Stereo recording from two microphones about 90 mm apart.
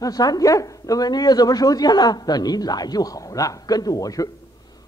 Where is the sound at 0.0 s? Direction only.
45° left (ahead or behind).